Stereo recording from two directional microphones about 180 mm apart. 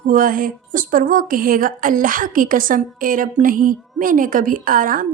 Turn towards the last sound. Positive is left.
turn(degrees=-50)  # may be behind; listen again after turning